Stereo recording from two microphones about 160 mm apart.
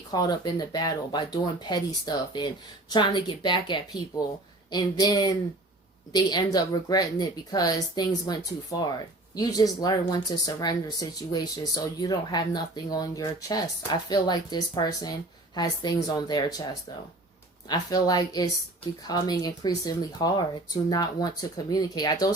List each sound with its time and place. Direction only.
0.1 s a woman's voice: 25° left (ahead or behind)